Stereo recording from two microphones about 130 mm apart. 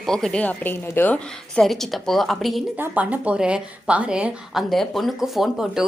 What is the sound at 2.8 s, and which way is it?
A woman's voice, 10° right (ahead or behind).